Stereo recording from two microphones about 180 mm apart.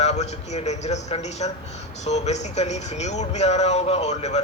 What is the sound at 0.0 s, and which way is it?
A man's voice, 40° left (ahead or behind).